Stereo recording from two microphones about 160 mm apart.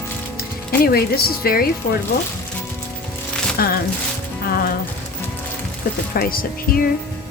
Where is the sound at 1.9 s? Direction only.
60° left (ahead or behind).